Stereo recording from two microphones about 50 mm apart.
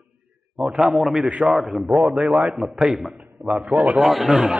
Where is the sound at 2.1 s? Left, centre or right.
Right.